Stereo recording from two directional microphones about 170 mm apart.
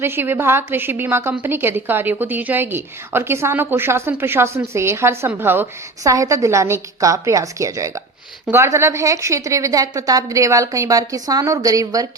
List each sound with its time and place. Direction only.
0.0 s a woman's voice: 15° right (ahead or behind)